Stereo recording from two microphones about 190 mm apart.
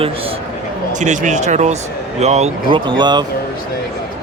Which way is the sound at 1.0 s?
40° right (ahead or behind).